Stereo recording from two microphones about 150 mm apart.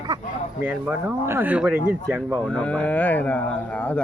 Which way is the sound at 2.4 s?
10° left (ahead or behind).